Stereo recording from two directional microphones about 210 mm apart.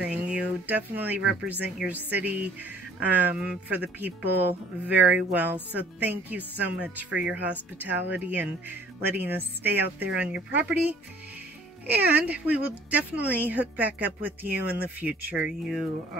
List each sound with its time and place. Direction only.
0.0 s speech: 5° right (ahead or behind)
12.0 s speech: 5° right (ahead or behind)
14.2 s speech: 45° right (ahead or behind)
15.3 s speech: centre (ahead or behind)